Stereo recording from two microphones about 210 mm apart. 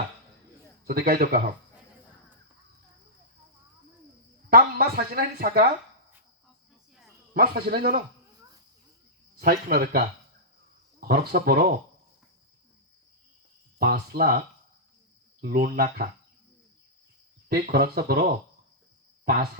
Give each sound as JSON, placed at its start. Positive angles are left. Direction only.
{"t": 0.9, "sound": "speech", "side_deg": -50}
{"t": 4.4, "sound": "speech", "side_deg": -45}
{"t": 7.3, "sound": "speech", "side_deg": -45}
{"t": 9.4, "sound": "speech", "side_deg": -45}
{"t": 11.1, "sound": "speech", "side_deg": -45}
{"t": 13.7, "sound": "speech", "side_deg": -45}
{"t": 15.4, "sound": "speech", "side_deg": -40}
{"t": 17.5, "sound": "speech", "side_deg": -45}
{"t": 19.2, "sound": "speech", "side_deg": -45}